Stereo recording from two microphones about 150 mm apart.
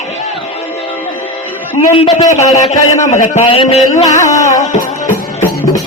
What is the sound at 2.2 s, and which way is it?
A man's voice, 20° left (ahead or behind).